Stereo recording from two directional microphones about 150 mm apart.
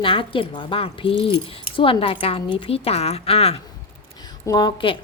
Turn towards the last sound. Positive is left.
turn(degrees=30)  # may be behind; listen again after turning